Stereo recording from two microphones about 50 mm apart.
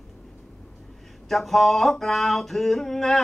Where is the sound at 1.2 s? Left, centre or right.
Centre.